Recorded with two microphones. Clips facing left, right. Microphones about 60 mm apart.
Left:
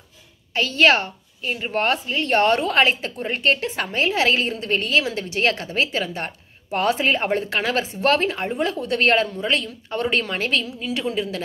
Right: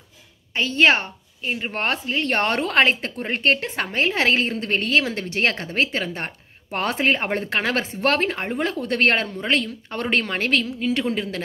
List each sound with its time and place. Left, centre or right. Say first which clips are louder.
0.5 s a woman's voice: left 1 dB; right